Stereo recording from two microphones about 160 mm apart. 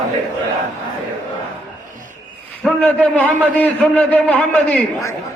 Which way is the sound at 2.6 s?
10° left (ahead or behind).